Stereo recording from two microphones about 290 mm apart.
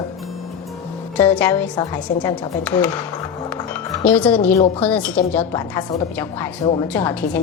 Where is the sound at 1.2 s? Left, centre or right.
Centre.